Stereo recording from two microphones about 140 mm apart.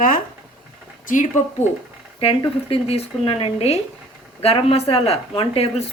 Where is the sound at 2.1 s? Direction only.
40° left (ahead or behind).